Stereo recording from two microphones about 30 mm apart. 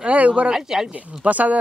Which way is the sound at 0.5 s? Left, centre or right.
Centre.